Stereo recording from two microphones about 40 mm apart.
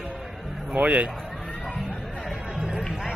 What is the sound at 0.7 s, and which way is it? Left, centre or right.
Speech, right.